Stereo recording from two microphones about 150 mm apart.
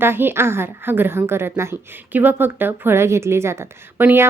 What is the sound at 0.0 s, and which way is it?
Speech, 15° right (ahead or behind).